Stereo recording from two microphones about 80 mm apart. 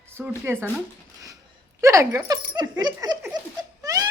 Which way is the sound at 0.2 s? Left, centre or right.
Right.